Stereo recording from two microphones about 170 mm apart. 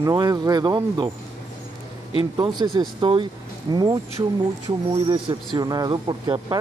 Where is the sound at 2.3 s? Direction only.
25° right (ahead or behind).